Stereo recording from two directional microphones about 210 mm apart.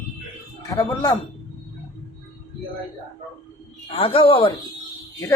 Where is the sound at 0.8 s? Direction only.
15° left (ahead or behind).